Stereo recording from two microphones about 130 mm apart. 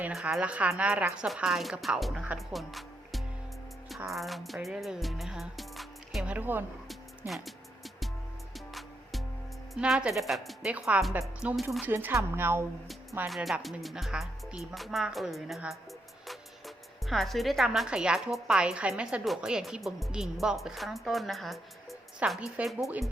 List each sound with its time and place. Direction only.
0.1 s speech: 5° right (ahead or behind)
2.5 s music: centre (ahead or behind)
6.3 s speech: 15° right (ahead or behind)
7.3 s speech: centre (ahead or behind)
8.5 s music: centre (ahead or behind)
9.7 s speech: 5° right (ahead or behind)
13.2 s speech: centre (ahead or behind)